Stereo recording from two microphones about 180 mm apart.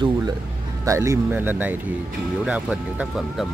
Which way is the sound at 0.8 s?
15° right (ahead or behind).